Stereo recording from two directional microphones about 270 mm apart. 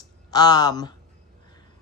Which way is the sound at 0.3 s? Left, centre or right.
Centre.